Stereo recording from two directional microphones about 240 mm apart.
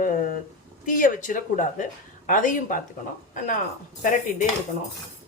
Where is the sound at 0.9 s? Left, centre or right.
Left.